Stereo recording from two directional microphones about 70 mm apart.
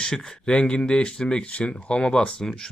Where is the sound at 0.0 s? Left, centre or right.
Centre.